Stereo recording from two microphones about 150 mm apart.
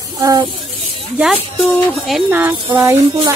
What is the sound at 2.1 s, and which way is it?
Speech, 10° right (ahead or behind).